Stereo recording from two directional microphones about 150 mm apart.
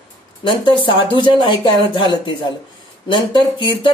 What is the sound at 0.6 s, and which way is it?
Speech, 35° left (ahead or behind).